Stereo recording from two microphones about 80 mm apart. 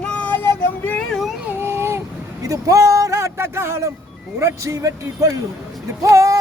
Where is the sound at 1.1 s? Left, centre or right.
Centre.